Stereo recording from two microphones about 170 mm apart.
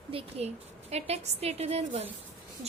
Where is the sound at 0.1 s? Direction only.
35° right (ahead or behind).